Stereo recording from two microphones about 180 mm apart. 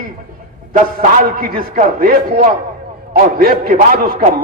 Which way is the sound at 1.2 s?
55° right (ahead or behind).